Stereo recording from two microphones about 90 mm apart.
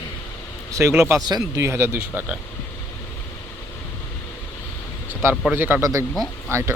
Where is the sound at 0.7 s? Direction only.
35° right (ahead or behind).